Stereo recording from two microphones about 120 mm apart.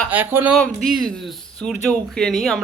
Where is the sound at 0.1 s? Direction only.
15° right (ahead or behind).